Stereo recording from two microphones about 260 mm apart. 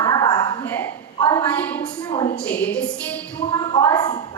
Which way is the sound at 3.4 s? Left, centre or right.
Centre.